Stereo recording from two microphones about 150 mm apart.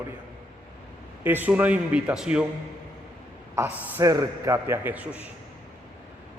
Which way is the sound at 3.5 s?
15° right (ahead or behind).